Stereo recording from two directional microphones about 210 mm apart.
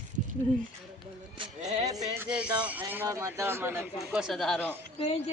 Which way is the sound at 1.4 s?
30° right (ahead or behind).